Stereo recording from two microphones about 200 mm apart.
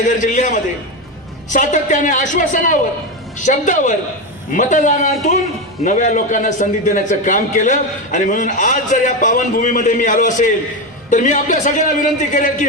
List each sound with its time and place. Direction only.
0.0 s a man's voice: 40° left (ahead or behind)